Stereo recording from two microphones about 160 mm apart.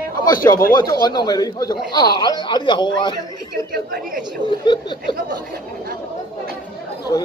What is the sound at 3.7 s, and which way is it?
Speech, 70° right (ahead or behind).